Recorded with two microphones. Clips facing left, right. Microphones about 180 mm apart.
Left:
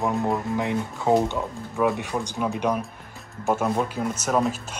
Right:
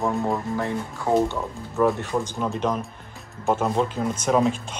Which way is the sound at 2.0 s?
15° left (ahead or behind).